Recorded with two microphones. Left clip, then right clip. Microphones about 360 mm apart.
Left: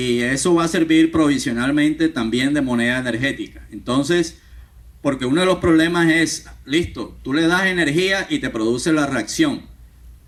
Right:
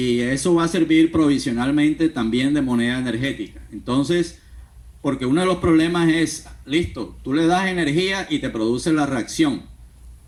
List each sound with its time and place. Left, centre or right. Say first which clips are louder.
0.0 s speech: left 2 dB; left